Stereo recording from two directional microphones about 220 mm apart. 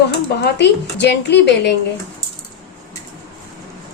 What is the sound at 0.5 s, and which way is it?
Speech, 50° left (ahead or behind).